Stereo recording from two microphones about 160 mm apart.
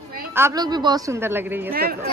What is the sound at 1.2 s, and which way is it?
Speech, 15° right (ahead or behind).